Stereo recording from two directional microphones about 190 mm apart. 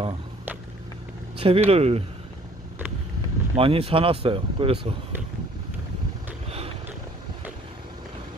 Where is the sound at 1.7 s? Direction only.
30° right (ahead or behind).